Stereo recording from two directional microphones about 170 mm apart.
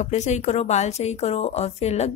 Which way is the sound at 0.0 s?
45° left (ahead or behind).